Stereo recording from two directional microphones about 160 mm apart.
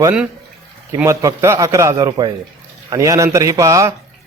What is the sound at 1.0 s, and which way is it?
A man's voice, 20° right (ahead or behind).